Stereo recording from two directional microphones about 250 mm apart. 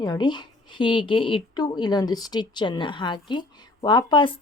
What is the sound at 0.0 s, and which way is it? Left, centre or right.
A woman's voice, centre.